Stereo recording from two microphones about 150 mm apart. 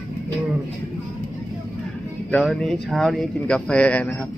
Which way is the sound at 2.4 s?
Centre (ahead or behind).